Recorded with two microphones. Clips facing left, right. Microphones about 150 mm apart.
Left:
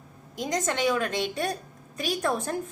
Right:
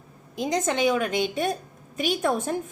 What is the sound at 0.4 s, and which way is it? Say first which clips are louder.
A woman's voice: right 3 dB; 25° right (ahead or behind).